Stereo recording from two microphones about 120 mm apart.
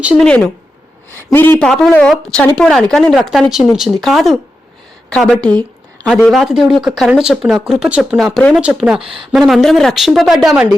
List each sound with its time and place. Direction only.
0.2 s a woman's voice: 10° left (ahead or behind)
1.6 s speech: 5° left (ahead or behind); by 8.2 s 10° right (ahead or behind)
8.2 s speech: 5° left (ahead or behind)
8.5 s speech: 5° right (ahead or behind)
9.0 s speech: 45° right (ahead or behind)
9.3 s speech: centre (ahead or behind)